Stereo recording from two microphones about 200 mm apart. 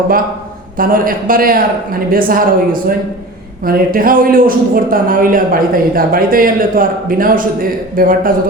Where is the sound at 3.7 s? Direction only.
45° right (ahead or behind).